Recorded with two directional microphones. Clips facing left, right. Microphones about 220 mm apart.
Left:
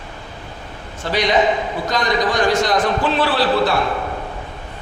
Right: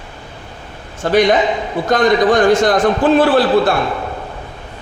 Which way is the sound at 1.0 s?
50° right (ahead or behind).